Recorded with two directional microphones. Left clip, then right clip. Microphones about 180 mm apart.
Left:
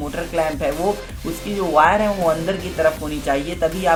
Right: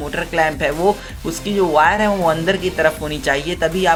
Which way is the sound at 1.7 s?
40° right (ahead or behind).